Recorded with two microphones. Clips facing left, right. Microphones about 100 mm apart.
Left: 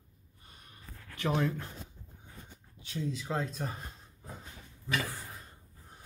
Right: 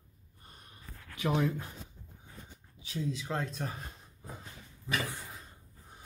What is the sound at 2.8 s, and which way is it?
Speech, centre (ahead or behind).